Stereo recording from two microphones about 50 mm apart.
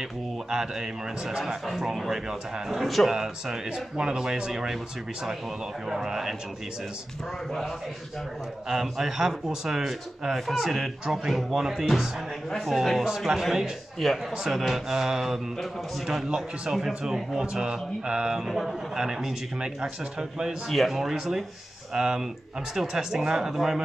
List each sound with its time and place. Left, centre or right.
0.5 s speech: centre
2.8 s speech: centre
5.9 s speech: centre
8.6 s speech: centre
16.3 s speech: centre
18.4 s speech: centre
20.6 s speech: centre
20.9 s speech: centre